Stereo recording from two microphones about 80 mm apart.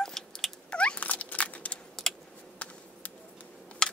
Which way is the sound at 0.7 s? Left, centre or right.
Centre.